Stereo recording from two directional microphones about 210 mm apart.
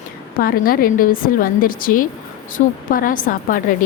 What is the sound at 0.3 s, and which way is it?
A woman's voice, 45° left (ahead or behind).